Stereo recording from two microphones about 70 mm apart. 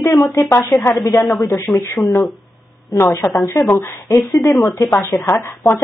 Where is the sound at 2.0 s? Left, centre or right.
Centre.